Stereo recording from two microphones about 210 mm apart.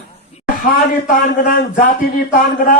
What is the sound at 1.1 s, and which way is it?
Speech, 45° left (ahead or behind).